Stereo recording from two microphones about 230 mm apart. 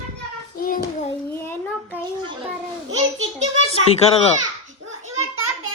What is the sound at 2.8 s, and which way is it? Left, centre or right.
Speech, right.